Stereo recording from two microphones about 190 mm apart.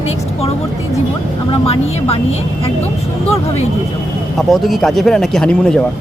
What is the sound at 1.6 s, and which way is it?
Speech, 30° left (ahead or behind).